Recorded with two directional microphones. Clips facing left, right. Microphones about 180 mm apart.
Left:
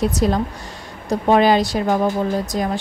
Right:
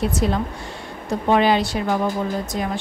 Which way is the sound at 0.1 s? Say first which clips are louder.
Left 3 dB; 40° left (ahead or behind).